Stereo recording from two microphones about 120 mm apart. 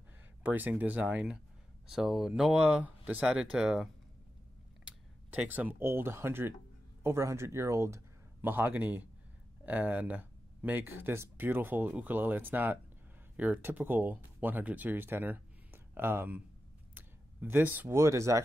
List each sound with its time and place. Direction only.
0.4 s speech: 15° right (ahead or behind)
5.3 s speech: 15° right (ahead or behind)